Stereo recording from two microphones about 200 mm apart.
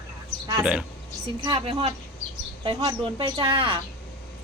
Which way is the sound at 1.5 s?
25° right (ahead or behind).